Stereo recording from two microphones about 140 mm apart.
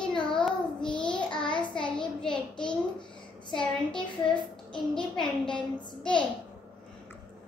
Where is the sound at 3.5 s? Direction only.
5° left (ahead or behind).